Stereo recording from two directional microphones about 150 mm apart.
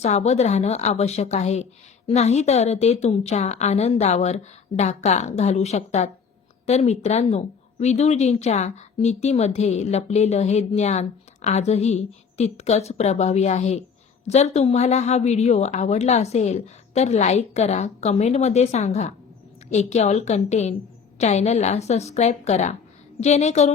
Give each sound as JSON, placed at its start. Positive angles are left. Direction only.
{"t": 0.0, "sound": "a woman's voice", "side_deg": 45}